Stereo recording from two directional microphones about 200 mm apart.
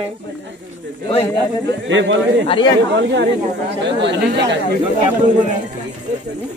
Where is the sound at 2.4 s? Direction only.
25° left (ahead or behind).